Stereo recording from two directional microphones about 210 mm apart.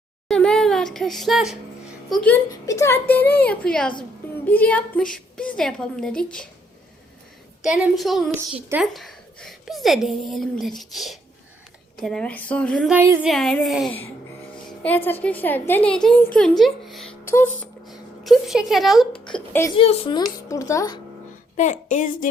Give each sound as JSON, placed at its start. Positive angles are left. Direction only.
{"t": 0.3, "sound": "a sound", "side_deg": 5}
{"t": 2.0, "sound": "a woman's voice", "side_deg": 5}
{"t": 2.5, "sound": "a child's voice", "side_deg": 15}
{"t": 7.6, "sound": "a woman's voice", "side_deg": 0}
{"t": 12.9, "sound": "a woman's voice", "side_deg": -10}
{"t": 17.2, "sound": "speech", "side_deg": 10}
{"t": 18.2, "sound": "speech", "side_deg": 0}
{"t": 19.3, "sound": "a child's voice", "side_deg": 10}
{"t": 19.7, "sound": "a woman's voice", "side_deg": 25}
{"t": 21.5, "sound": "a woman's voice", "side_deg": 35}